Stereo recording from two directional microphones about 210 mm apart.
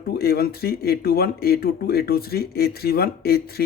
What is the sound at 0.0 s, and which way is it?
Speech, 45° left (ahead or behind).